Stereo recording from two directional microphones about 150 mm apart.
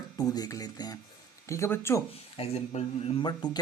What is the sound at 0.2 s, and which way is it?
Speech, 25° left (ahead or behind).